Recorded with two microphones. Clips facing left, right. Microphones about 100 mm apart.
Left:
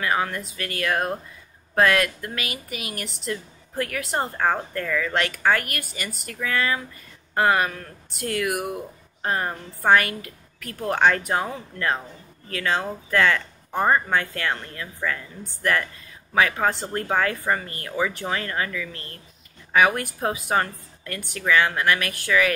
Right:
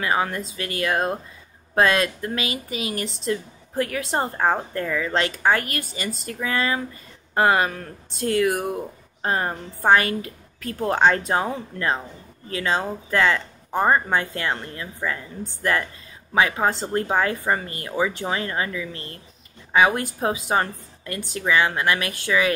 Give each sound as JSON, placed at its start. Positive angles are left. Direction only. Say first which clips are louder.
{"t": 0.0, "sound": "speech", "louder": "right 1 dB", "side_deg": -20}
{"t": 12.4, "sound": "speech", "louder": "right 1 dB", "side_deg": -20}